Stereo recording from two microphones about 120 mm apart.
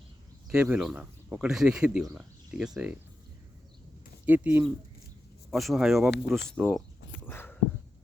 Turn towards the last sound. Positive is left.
turn(degrees=15)  # may be behind; listen again after turning